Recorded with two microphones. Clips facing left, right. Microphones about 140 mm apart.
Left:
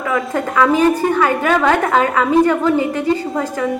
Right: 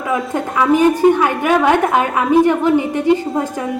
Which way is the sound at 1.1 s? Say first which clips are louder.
Even; 15° right (ahead or behind).